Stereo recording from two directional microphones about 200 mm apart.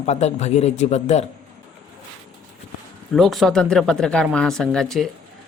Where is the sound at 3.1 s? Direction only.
Centre (ahead or behind).